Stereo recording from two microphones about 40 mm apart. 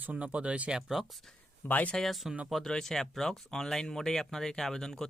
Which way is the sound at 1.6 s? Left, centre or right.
Left.